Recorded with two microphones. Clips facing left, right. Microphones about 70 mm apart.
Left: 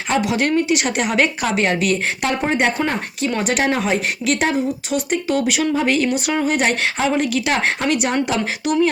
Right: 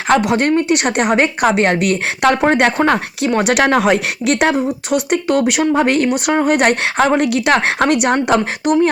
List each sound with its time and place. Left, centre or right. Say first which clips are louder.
0.1 s a woman's voice: right 5 dB; right